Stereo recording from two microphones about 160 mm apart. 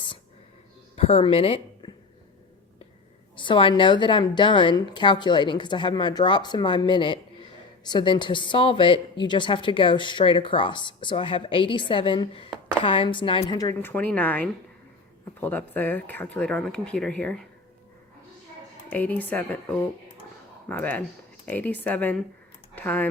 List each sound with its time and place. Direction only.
0.9 s a woman's voice: 35° left (ahead or behind)
3.3 s a woman's voice: 30° left (ahead or behind)
13.8 s speech: 10° left (ahead or behind)
18.9 s speech: 10° left (ahead or behind)